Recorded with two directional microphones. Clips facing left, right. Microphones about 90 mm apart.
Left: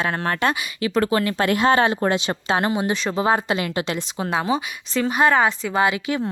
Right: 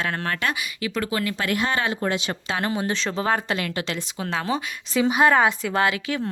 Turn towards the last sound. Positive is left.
turn(degrees=15)  # may be behind; listen again after turning